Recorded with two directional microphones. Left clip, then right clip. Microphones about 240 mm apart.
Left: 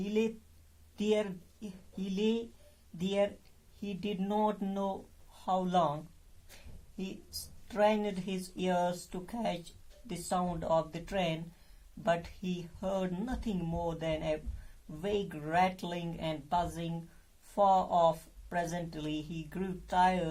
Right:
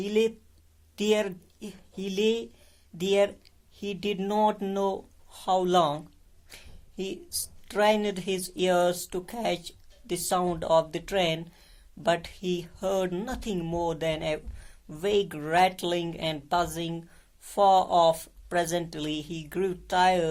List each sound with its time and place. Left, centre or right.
0.0 s speech: right
7.7 s speech: right